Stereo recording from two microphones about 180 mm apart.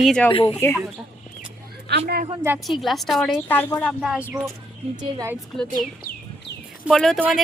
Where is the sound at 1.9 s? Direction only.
65° right (ahead or behind).